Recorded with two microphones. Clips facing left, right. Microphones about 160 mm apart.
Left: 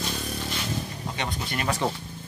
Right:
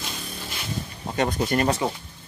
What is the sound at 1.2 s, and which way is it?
Speech, 45° right (ahead or behind).